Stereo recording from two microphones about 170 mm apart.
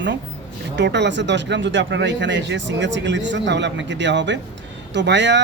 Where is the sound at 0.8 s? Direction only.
90° right.